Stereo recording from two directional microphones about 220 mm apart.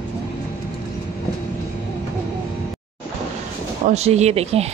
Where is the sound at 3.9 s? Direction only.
30° right (ahead or behind).